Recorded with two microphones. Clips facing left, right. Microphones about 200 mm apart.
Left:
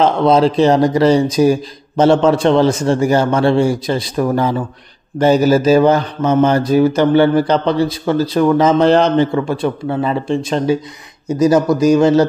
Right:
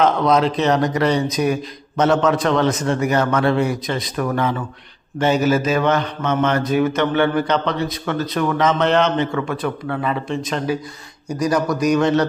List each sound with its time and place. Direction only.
0.0 s mantra: 30° left (ahead or behind)
11.2 s speech: 25° left (ahead or behind)